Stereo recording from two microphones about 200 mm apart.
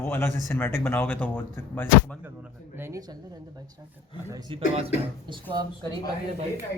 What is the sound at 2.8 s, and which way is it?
Speech, 15° right (ahead or behind).